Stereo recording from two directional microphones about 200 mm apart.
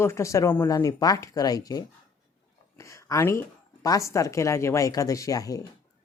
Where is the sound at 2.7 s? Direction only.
15° left (ahead or behind).